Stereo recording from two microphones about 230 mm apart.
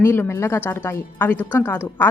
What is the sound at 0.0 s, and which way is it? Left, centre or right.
A woman's voice, centre.